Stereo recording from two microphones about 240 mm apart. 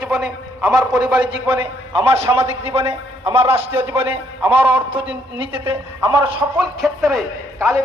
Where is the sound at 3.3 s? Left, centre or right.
Right.